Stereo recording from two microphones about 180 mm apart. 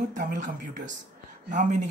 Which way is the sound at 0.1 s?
45° right (ahead or behind).